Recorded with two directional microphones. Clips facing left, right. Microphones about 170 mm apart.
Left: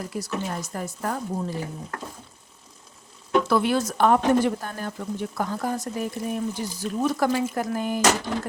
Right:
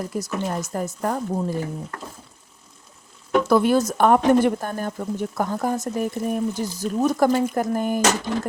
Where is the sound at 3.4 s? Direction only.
45° right (ahead or behind).